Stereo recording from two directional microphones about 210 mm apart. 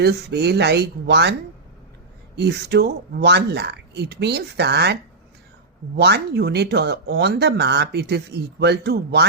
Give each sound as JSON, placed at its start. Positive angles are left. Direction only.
{"t": 0.0, "sound": "speech", "side_deg": -50}
{"t": 6.0, "sound": "speech", "side_deg": -50}